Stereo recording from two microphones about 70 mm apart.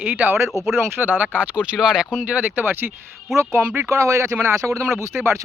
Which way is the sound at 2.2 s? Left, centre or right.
Right.